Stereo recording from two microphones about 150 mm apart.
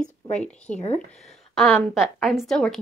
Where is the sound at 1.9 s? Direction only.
Centre (ahead or behind).